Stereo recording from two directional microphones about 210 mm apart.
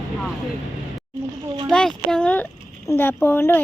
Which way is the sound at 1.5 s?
20° right (ahead or behind).